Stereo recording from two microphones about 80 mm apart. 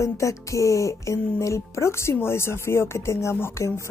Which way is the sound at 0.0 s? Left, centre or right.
Left.